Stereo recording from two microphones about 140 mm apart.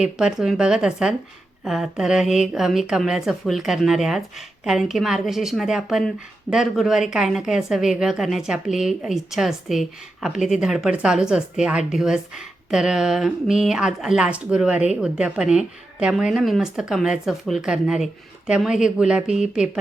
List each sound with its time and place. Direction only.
0.0 s a woman's voice: 5° right (ahead or behind)